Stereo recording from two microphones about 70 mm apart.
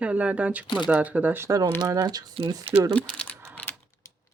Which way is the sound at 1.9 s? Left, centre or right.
Right.